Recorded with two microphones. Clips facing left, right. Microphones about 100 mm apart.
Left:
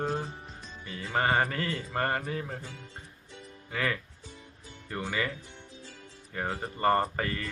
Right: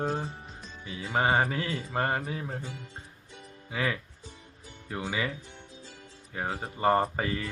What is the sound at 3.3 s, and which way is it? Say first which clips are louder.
Music: even; 15° right (ahead or behind).